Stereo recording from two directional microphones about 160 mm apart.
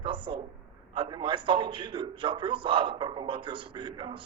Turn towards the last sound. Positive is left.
turn(degrees=-30)  # may be behind; listen again after turning